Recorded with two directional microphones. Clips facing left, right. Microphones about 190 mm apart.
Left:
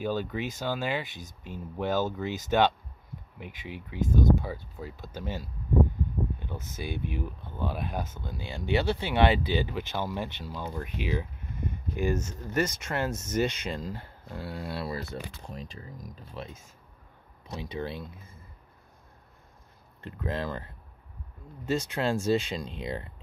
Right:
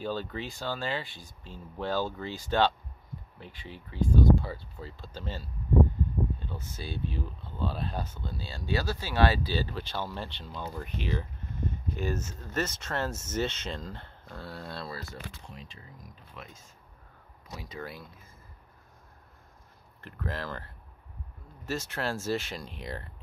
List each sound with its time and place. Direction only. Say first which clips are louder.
0.0 s speech: left 3 dB; 10° left (ahead or behind)
15.4 s speech: left 6 dB; 40° left (ahead or behind)
17.5 s speech: left 6 dB; 25° left (ahead or behind)
20.0 s speech: left 4 dB; 20° left (ahead or behind)